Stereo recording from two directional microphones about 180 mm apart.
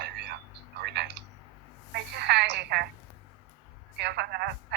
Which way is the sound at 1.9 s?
65° right (ahead or behind).